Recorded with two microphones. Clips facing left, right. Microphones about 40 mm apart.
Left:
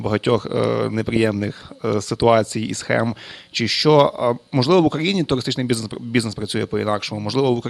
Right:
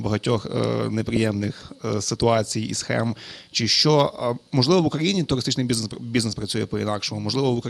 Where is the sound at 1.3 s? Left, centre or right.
Centre.